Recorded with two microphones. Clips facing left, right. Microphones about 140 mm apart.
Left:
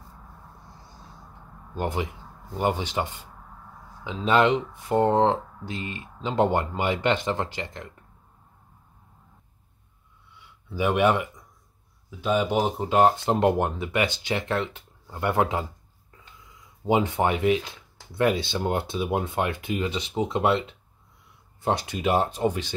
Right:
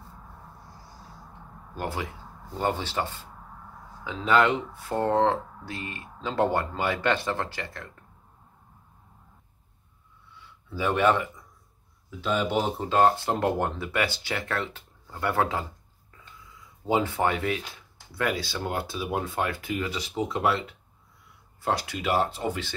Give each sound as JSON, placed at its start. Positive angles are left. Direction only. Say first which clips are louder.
{"t": 0.7, "sound": "music", "louder": "right 1 dB", "side_deg": 20}
{"t": 1.8, "sound": "speech", "louder": "left 4 dB", "side_deg": 20}
{"t": 10.3, "sound": "a sound", "louder": "left 2 dB", "side_deg": 15}
{"t": 12.2, "sound": "speech", "louder": "left 3 dB", "side_deg": 15}
{"t": 16.8, "sound": "speech", "louder": "left 2 dB", "side_deg": 20}